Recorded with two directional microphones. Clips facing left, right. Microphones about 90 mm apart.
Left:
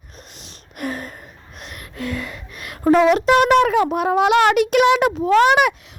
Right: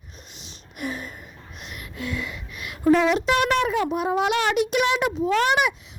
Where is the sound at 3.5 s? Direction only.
65° left (ahead or behind).